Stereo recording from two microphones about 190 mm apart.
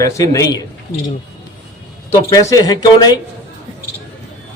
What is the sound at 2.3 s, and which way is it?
Speech, 20° left (ahead or behind).